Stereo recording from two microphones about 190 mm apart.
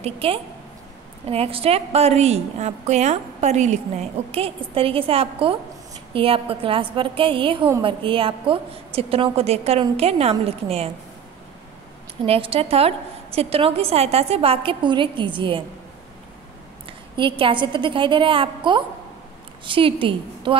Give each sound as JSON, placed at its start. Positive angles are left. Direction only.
{"t": 0.0, "sound": "a woman's voice", "side_deg": -30}
{"t": 12.3, "sound": "a woman's voice", "side_deg": -30}
{"t": 17.2, "sound": "a woman's voice", "side_deg": -25}